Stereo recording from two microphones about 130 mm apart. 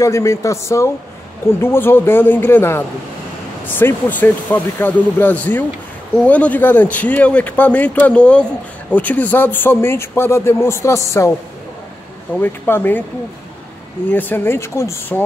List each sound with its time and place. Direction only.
0.0 s a man's voice: 20° left (ahead or behind)
12.4 s a man's voice: 15° left (ahead or behind)
14.1 s a man's voice: 15° left (ahead or behind)